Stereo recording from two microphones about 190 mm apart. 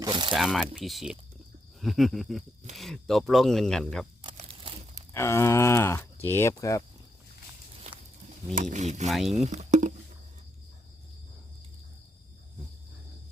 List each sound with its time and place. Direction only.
0.0 s speech: 25° right (ahead or behind)
0.3 s speech: centre (ahead or behind)
4.2 s crumpling: 25° right (ahead or behind)
5.1 s speech: 15° left (ahead or behind)
8.7 s speech: 35° right (ahead or behind)
9.0 s speech: centre (ahead or behind)
9.4 s a sound: 35° right (ahead or behind)